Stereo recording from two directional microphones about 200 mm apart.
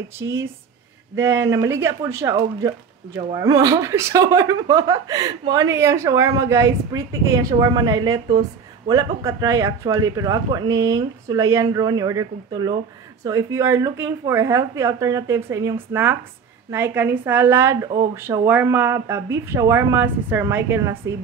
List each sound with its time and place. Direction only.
1.1 s speech: 10° right (ahead or behind)